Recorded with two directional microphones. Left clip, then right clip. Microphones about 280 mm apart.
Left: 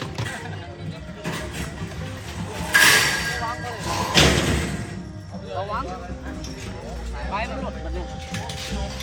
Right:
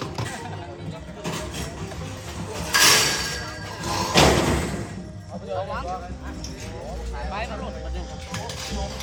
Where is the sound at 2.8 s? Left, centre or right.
Centre.